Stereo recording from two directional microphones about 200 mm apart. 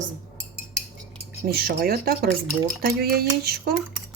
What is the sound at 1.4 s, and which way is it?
Cutlery, 50° right (ahead or behind).